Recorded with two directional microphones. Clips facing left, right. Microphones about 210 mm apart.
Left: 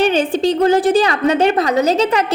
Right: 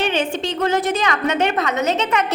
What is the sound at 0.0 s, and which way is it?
A woman's voice, 35° left (ahead or behind).